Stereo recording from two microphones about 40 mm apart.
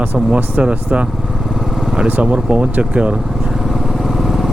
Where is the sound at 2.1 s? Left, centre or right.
Right.